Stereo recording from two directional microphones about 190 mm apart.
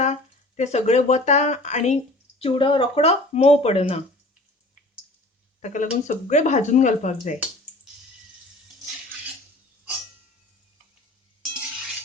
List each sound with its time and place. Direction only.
0.0 s speech: 35° left (ahead or behind)
5.6 s speech: 40° left (ahead or behind)